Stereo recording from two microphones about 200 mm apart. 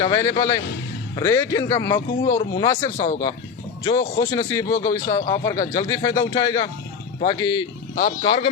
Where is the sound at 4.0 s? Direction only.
20° left (ahead or behind).